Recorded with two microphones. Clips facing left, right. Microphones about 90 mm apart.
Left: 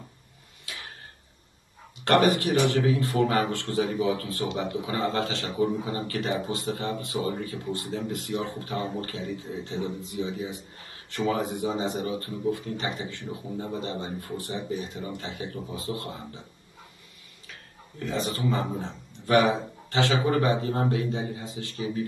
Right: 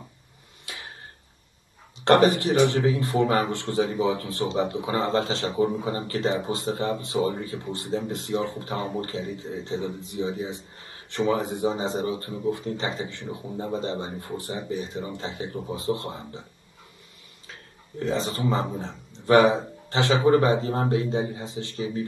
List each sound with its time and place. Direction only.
0.7 s tick-tock: 20° right (ahead or behind)
2.0 s a man's voice: 25° right (ahead or behind)
17.5 s a man's voice: 30° right (ahead or behind)